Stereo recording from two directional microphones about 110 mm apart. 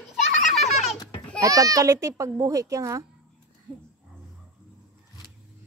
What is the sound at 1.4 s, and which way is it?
A child's voice, 30° right (ahead or behind).